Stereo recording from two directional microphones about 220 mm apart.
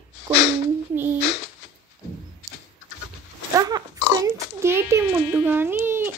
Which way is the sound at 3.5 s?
15° right (ahead or behind).